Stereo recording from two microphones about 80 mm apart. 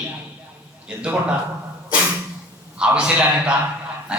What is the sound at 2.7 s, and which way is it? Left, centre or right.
Speech, centre.